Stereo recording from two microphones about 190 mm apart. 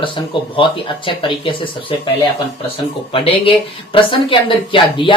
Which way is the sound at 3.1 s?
30° left (ahead or behind).